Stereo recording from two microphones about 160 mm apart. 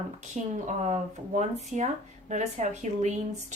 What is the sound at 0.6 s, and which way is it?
A woman's voice, 50° right (ahead or behind).